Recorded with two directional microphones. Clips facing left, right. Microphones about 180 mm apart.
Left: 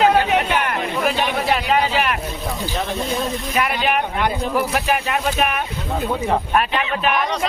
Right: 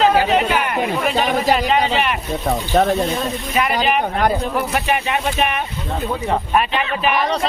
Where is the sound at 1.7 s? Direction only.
Centre (ahead or behind).